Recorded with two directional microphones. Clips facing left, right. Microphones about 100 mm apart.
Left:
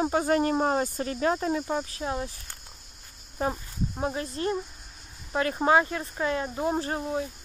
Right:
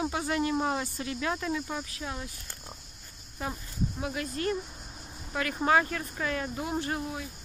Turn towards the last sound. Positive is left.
turn(degrees=30)  # may be behind; listen again after turning